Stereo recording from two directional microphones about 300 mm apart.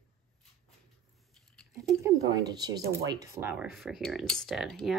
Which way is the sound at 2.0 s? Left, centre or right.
Centre.